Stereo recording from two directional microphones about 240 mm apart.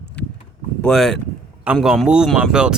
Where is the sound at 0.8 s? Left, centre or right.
Centre.